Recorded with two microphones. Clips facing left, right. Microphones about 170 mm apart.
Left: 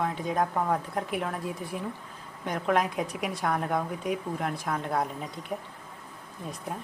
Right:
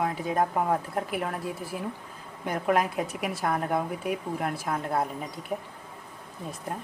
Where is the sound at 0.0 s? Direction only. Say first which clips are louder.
Right 1 dB; 5° right (ahead or behind).